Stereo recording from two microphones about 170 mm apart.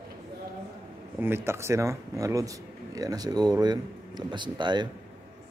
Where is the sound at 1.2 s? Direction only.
15° right (ahead or behind).